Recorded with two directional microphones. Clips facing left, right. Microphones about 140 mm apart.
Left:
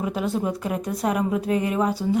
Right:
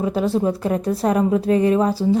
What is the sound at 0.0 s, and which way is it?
A woman's voice, 35° right (ahead or behind).